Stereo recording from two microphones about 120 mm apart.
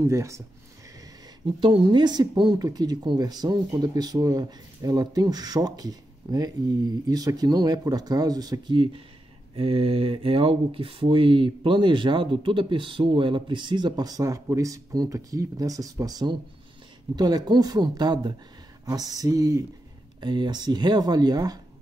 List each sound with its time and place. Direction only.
0.0 s speech: 25° right (ahead or behind)
1.4 s speech: 40° right (ahead or behind)
9.6 s speech: 55° right (ahead or behind); by 21.5 s 35° right (ahead or behind)